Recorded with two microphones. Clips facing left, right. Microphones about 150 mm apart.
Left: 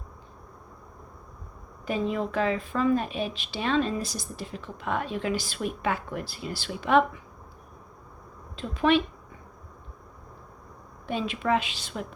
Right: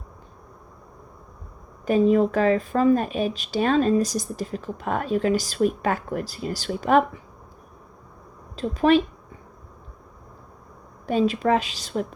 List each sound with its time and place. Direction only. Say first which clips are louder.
1.8 s speech: right 10 dB; 45° right (ahead or behind)
8.5 s a woman's voice: right 5 dB; 40° right (ahead or behind)
11.0 s a woman's voice: right 8 dB; 40° right (ahead or behind)